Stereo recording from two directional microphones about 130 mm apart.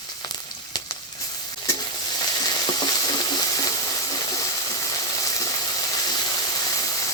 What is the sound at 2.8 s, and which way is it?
Frying, 30° left (ahead or behind).